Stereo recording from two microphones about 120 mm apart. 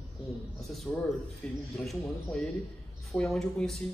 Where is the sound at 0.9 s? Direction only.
5° left (ahead or behind).